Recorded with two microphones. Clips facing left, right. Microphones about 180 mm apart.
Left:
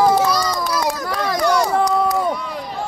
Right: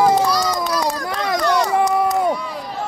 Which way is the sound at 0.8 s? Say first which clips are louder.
Left 1 dB; 5° left (ahead or behind).